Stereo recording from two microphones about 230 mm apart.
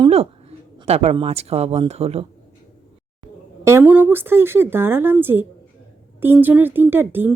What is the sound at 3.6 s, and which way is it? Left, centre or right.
Speech, centre.